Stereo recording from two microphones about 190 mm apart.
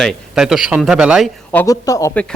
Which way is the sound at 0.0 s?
Centre (ahead or behind).